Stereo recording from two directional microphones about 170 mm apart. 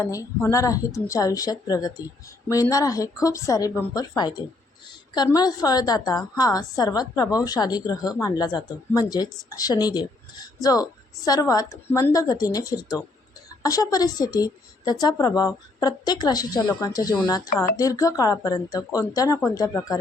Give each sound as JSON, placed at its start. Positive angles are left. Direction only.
{"t": 0.0, "sound": "a woman's voice", "side_deg": 20}